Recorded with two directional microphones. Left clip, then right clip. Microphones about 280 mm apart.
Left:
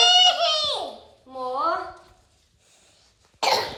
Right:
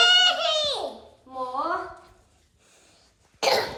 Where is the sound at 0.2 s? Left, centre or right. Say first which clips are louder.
Left 2 dB; centre.